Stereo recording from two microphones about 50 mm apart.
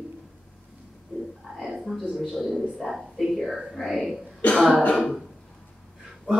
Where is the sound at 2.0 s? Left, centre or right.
Centre.